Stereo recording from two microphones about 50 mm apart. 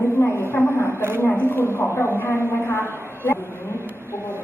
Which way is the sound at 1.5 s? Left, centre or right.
Left.